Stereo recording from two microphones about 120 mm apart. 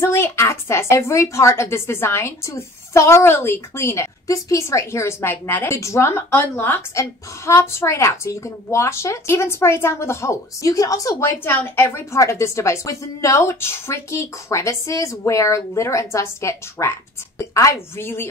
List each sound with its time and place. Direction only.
0.0 s a woman's voice: 20° left (ahead or behind)
17.9 s a woman's voice: 20° left (ahead or behind)